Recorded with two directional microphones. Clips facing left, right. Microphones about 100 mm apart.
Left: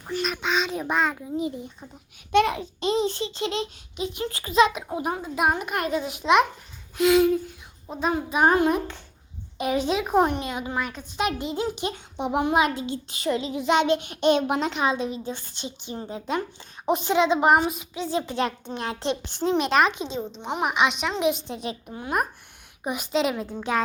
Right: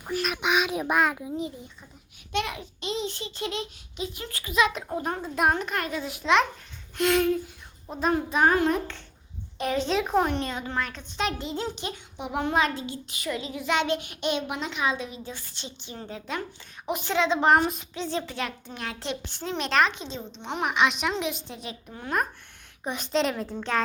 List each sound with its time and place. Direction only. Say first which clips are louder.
0.1 s a sound: left 1 dB; 5° right (ahead or behind)
0.4 s a child's voice: right 2 dB; 10° right (ahead or behind)
2.5 s a child's voice: left 8 dB; 35° left (ahead or behind)
4.7 s a woman's voice: left 2 dB; 5° left (ahead or behind)
6.9 s speech: left 4 dB; 5° left (ahead or behind)
8.4 s a woman's voice: left 3 dB; 20° left (ahead or behind)
12.1 s a child's voice: left 7 dB; 30° left (ahead or behind)
12.4 s a woman's voice: left 3 dB; 15° left (ahead or behind)
12.8 s a child's voice: left 5 dB; 30° left (ahead or behind)
14.2 s speech: left 8 dB; 40° left (ahead or behind)
14.8 s a child's voice: left 4 dB; 25° left (ahead or behind); by 21.2 s centre (ahead or behind)
21.2 s a child's voice: left 7 dB; 20° left (ahead or behind)